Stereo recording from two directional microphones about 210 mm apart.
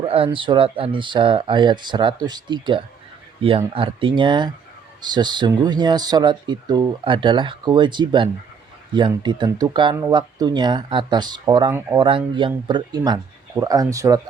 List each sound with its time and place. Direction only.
0.0 s speech: 25° right (ahead or behind)